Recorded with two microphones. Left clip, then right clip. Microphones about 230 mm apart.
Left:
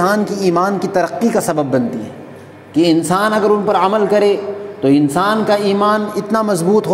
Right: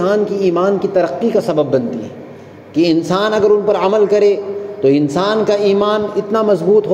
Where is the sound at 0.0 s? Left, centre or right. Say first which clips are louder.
Right 1 dB; left.